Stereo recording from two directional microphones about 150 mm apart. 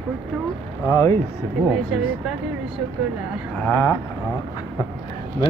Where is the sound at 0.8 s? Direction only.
20° left (ahead or behind).